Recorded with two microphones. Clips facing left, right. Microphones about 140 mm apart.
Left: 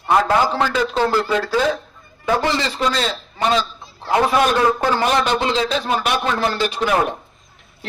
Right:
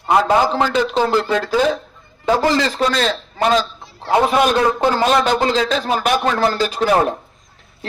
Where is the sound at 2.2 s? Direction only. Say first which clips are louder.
Right 3 dB; 40° right (ahead or behind); by 3.1 s 55° right (ahead or behind).